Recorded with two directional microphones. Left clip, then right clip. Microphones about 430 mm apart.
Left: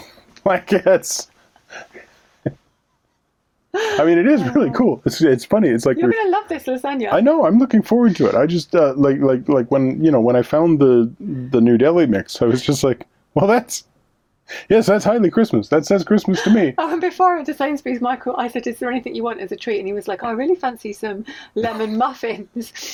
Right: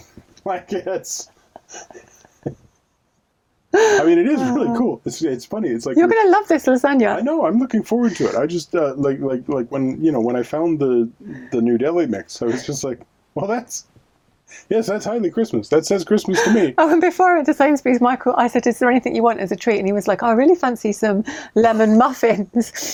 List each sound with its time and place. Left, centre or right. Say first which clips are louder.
0.4 s speech: left 9 dB; left
4.0 s speech: left 1 dB; centre; by 5.9 s left
6.1 s speech: right 5 dB; right
7.2 s speech: left 5 dB; left
15.7 s speech: right 1 dB; centre
16.7 s speech: right 5 dB; right